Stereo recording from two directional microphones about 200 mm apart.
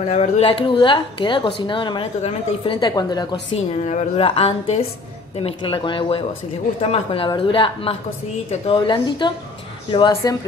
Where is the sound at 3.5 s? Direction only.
35° left (ahead or behind).